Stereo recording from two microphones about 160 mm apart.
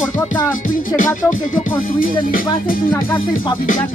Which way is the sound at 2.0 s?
60° left (ahead or behind).